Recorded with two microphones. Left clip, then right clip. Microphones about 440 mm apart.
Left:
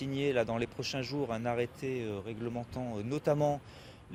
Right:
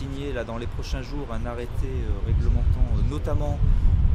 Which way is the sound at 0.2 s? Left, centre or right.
Right.